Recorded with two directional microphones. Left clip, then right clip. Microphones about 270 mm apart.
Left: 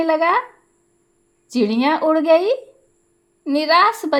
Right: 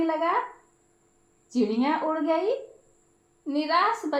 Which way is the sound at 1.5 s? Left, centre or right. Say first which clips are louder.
Left 7 dB; left.